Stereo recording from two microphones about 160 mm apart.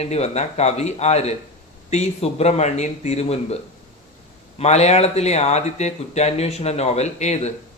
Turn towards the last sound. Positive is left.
turn(degrees=45)  # may be behind; listen again after turning